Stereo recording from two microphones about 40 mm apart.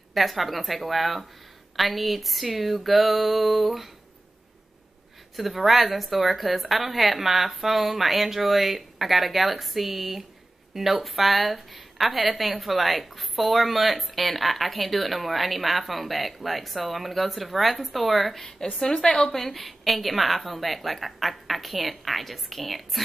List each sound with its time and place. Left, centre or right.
0.1 s a woman's voice: centre
5.3 s a woman's voice: centre
18.8 s a woman's voice: centre
19.4 s a woman's voice: centre